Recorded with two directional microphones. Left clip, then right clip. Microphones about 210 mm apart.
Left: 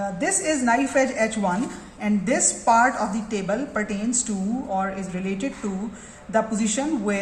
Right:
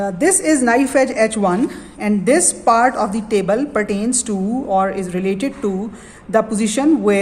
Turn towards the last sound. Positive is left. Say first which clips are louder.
# right 10 dB
turn(degrees=-50)  # may be behind; listen again after turning